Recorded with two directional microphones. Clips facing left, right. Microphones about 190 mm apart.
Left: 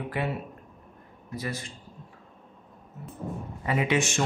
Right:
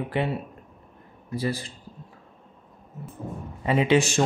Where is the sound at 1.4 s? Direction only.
30° right (ahead or behind).